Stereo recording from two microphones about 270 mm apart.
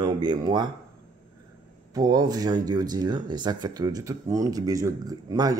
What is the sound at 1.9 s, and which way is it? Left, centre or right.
Speech, centre.